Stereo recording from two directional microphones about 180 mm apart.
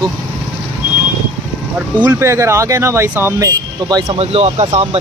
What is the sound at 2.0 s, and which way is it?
Speech, 15° right (ahead or behind).